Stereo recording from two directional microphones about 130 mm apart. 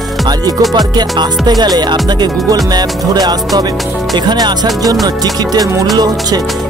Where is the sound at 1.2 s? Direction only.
30° right (ahead or behind).